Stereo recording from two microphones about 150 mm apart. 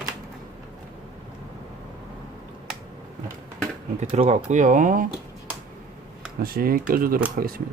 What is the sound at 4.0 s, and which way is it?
Speech, 45° right (ahead or behind).